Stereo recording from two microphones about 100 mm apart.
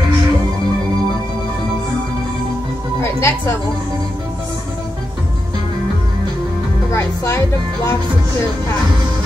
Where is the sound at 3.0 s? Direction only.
25° left (ahead or behind).